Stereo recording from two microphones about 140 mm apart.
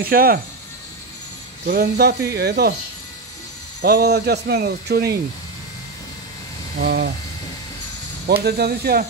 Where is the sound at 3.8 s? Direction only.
90° right.